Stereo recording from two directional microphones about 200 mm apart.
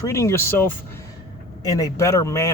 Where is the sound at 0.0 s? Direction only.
15° left (ahead or behind).